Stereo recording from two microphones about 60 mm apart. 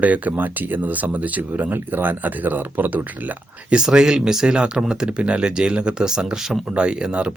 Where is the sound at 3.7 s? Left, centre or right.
Centre.